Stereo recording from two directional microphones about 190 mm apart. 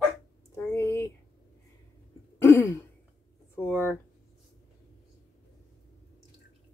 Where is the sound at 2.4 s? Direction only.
10° left (ahead or behind).